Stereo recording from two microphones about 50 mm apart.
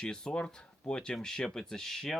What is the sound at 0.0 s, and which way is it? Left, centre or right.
Speech, centre.